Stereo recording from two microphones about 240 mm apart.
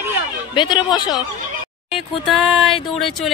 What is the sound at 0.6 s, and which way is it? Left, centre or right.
Speech, centre.